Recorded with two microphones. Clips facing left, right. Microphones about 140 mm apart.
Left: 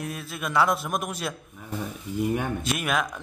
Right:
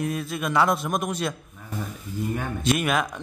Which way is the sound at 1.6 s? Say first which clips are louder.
Left 1 dB; 20° left (ahead or behind).